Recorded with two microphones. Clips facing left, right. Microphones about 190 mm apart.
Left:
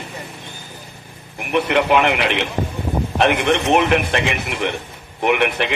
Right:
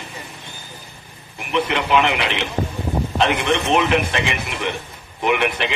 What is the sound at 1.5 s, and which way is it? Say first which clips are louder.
Speech: left 3 dB; 60° left (ahead or behind).